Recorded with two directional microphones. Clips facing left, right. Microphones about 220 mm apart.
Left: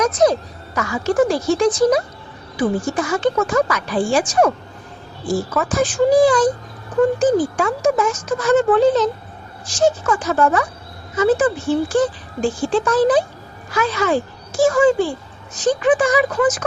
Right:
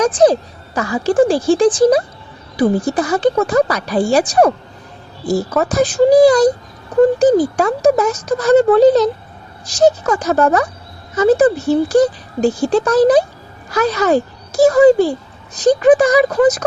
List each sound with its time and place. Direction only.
0.0 s a child's voice: 30° right (ahead or behind)